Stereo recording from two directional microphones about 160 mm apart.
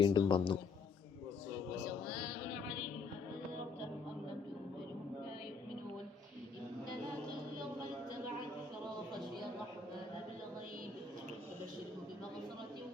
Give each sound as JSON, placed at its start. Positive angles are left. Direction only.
{"t": 0.0, "sound": "a man's voice", "side_deg": 30}